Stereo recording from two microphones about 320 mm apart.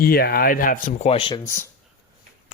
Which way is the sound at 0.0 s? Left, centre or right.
Left.